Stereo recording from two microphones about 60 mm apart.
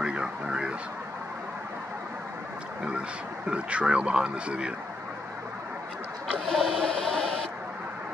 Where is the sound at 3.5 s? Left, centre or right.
Centre.